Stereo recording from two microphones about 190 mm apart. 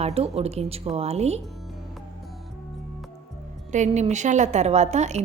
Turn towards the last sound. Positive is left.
turn(degrees=-35)  # may be behind; listen again after turning